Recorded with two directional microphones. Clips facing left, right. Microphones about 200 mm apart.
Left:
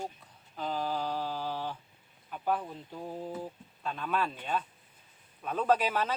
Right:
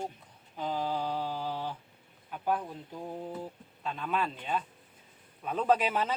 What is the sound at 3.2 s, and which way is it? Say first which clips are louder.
Mantra: left 1 dB; 5° left (ahead or behind).